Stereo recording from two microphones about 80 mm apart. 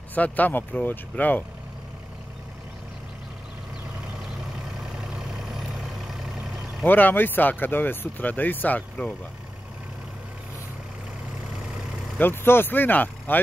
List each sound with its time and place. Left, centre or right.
0.1 s speech: left
4.7 s vehicle: centre
6.9 s speech: left
12.2 s speech: left